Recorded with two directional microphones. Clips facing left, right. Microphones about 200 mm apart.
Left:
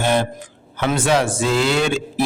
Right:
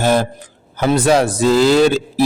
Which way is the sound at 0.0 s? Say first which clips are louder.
Right 3 dB; 40° right (ahead or behind).